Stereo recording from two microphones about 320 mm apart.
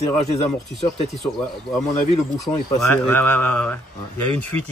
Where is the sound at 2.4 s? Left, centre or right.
Centre.